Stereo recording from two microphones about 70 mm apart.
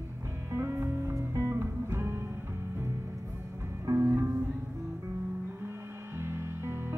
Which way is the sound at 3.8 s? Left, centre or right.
Right.